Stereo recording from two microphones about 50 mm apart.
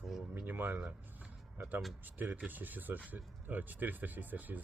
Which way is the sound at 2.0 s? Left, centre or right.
Right.